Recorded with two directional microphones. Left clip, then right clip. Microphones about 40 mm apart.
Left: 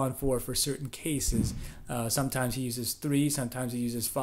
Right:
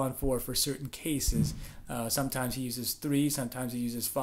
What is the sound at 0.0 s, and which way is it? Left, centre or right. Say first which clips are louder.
Speech: left 1 dB; left.